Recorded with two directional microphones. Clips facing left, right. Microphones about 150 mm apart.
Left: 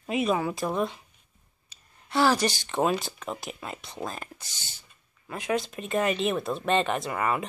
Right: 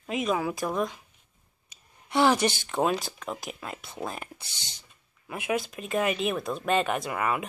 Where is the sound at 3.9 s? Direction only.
15° right (ahead or behind).